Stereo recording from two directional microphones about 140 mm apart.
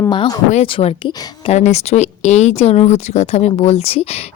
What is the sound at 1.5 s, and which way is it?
Speech, 50° left (ahead or behind).